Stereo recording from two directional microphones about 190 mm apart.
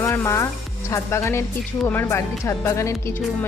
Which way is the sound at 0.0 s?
15° left (ahead or behind).